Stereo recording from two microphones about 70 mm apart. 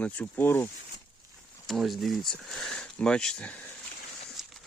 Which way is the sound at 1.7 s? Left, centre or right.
Centre.